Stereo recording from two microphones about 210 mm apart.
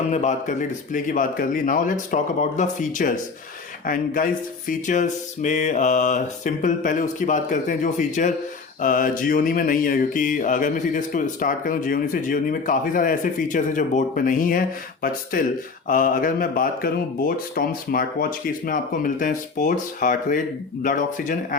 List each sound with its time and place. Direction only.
0.1 s mantra: 35° left (ahead or behind)